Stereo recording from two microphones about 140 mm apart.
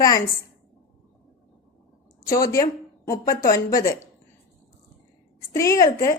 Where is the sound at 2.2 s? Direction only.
25° left (ahead or behind).